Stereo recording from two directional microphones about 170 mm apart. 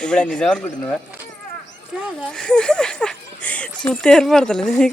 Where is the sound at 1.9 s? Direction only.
5° right (ahead or behind).